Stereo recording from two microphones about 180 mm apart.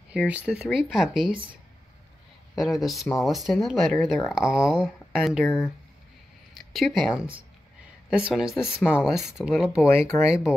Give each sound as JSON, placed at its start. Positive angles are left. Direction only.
{"t": 0.1, "sound": "speech", "side_deg": -5}
{"t": 2.6, "sound": "speech", "side_deg": 0}
{"t": 5.4, "sound": "speech", "side_deg": 10}
{"t": 6.7, "sound": "speech", "side_deg": 0}
{"t": 10.0, "sound": "speech", "side_deg": 15}